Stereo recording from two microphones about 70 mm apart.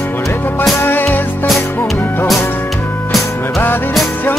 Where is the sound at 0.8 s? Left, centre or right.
Left.